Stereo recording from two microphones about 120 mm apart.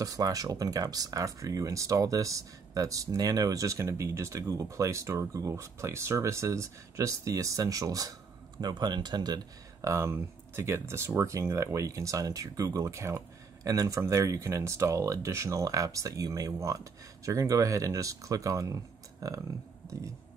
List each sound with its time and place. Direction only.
0.0 s speech: 30° right (ahead or behind)